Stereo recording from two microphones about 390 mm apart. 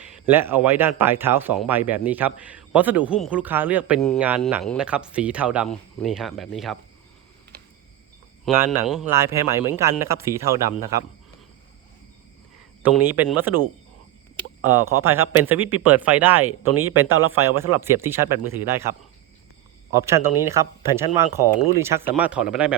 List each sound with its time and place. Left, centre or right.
0.0 s speech: centre
8.4 s speech: centre
12.8 s speech: centre
15.1 s speech: centre
16.8 s speech: right
17.6 s speech: centre